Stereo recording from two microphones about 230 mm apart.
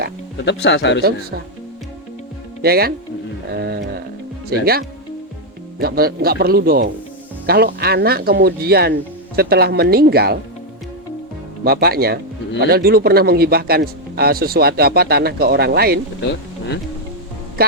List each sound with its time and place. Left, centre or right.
0.4 s speech: left
2.6 s speech: right
3.5 s music: right
4.6 s speech: right
11.6 s speech: right
16.2 s speech: left
17.6 s music: right